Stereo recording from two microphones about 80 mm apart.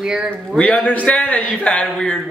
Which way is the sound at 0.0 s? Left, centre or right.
Centre.